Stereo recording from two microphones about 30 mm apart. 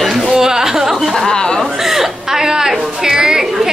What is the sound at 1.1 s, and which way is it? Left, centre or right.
Speech, left.